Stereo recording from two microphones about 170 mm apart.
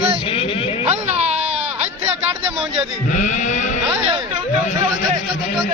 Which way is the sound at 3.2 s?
45° left (ahead or behind).